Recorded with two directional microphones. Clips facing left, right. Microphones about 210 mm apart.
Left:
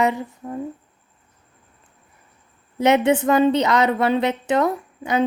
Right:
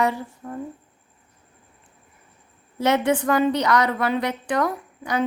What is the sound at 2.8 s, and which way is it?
A woman's voice, 20° left (ahead or behind).